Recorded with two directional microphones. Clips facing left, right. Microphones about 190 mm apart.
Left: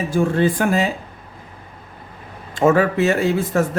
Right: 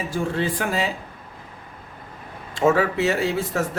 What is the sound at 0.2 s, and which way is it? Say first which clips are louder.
Speech: left 7 dB; 50° left (ahead or behind).